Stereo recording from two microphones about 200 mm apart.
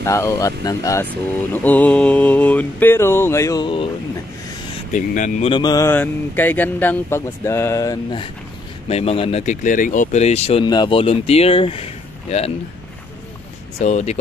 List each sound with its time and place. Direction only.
0.0 s speech: 15° left (ahead or behind)
4.9 s speech: 40° left (ahead or behind)
5.5 s speech: 20° left (ahead or behind)
13.7 s speech: 35° left (ahead or behind)